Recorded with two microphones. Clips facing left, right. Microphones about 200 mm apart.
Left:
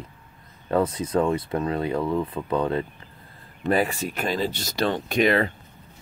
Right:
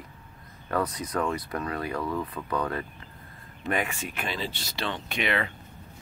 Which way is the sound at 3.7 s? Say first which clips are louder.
Left 7 dB; 35° left (ahead or behind).